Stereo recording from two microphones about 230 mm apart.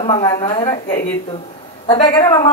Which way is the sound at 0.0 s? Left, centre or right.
Left.